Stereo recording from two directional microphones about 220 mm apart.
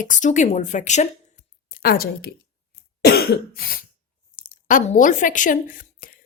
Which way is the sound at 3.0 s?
45° left (ahead or behind).